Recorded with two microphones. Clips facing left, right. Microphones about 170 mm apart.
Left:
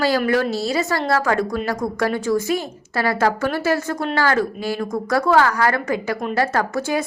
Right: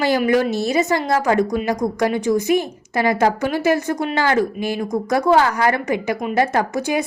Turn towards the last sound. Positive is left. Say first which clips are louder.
# right 1 dB
turn(degrees=-20)  # may be behind; listen again after turning